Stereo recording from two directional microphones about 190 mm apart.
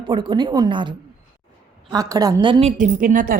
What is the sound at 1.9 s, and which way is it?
A woman's voice, 20° right (ahead or behind).